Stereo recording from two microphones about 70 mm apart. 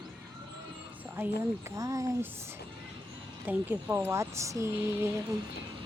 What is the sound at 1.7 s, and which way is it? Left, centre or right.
Speech, right.